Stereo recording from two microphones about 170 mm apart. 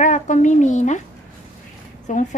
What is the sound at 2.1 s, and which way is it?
Speech, 50° left (ahead or behind).